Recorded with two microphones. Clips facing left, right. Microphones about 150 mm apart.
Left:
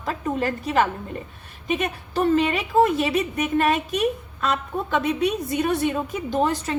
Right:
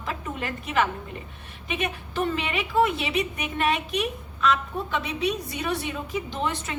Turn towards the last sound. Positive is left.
turn(degrees=40)  # may be behind; listen again after turning